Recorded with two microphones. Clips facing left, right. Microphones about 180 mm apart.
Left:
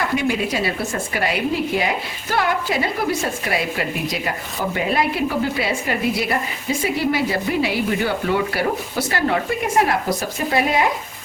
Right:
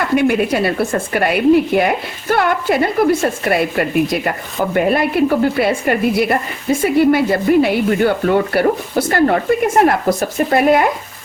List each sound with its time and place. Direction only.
0.2 s speech: 60° right (ahead or behind)